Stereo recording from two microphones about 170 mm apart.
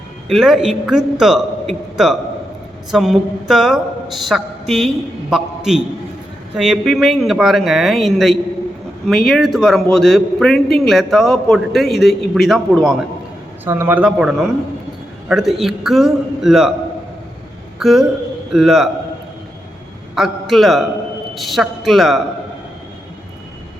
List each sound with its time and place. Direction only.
0.3 s a man's voice: centre (ahead or behind)
13.7 s a man's voice: 15° right (ahead or behind)
17.7 s a man's voice: centre (ahead or behind)
20.1 s a man's voice: centre (ahead or behind)